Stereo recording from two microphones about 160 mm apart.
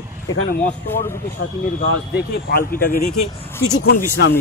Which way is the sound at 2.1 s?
80° left.